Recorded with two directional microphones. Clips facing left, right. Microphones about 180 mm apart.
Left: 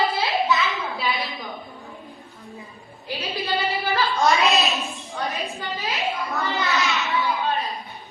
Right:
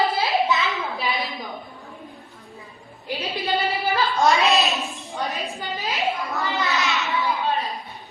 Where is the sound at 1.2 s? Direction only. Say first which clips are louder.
Right 1 dB; 20° right (ahead or behind).